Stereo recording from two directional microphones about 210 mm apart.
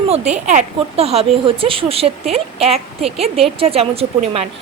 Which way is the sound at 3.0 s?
Centre (ahead or behind).